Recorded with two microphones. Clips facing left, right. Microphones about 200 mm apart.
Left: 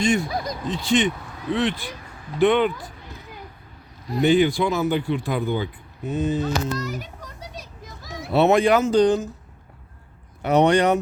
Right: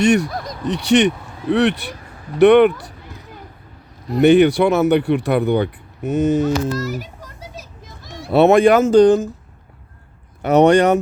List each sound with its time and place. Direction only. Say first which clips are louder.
0.0 s speech: right 6 dB; 75° right (ahead or behind)
0.3 s a sound: left 1 dB; centre (ahead or behind)
0.6 s speech: right 7 dB; 75° right (ahead or behind)
4.2 s speech: right 7 dB; 70° right (ahead or behind)
6.4 s a sound: right 6 dB; 5° right (ahead or behind)
8.3 s speech: right 6 dB; 55° right (ahead or behind)
10.4 s speech: right 5 dB; 45° right (ahead or behind)